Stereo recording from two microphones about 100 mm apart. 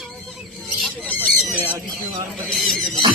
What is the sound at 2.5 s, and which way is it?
Speech, centre (ahead or behind).